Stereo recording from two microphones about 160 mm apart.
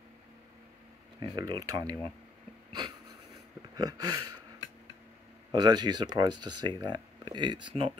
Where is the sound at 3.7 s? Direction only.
25° right (ahead or behind).